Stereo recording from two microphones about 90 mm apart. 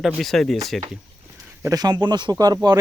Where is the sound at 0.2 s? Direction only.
5° left (ahead or behind).